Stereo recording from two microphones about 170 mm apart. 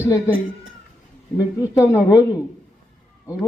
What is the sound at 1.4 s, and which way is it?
Speech, 15° left (ahead or behind).